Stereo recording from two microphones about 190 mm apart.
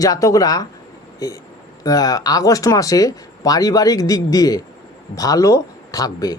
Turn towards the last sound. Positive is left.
turn(degrees=20)  # may be behind; listen again after turning